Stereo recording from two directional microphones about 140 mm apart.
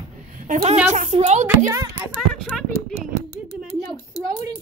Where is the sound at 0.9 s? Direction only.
50° right (ahead or behind).